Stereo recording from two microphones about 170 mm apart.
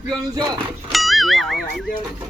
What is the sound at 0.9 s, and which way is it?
Speech, centre (ahead or behind).